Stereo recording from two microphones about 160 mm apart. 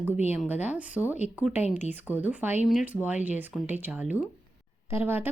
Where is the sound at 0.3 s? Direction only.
10° right (ahead or behind).